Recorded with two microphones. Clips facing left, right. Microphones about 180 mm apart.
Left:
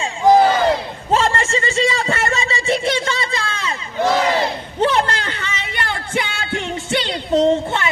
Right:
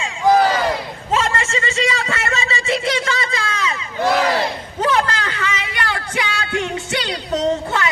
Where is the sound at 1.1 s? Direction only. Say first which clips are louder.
Left 3 dB; 35° left (ahead or behind).